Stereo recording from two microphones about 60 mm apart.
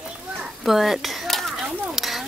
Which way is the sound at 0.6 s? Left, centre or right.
Centre.